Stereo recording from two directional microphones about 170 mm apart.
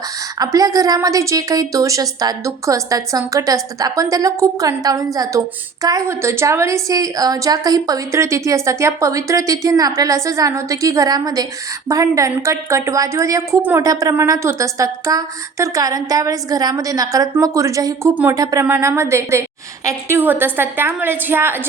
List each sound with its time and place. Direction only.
0.3 s a woman's voice: 20° right (ahead or behind)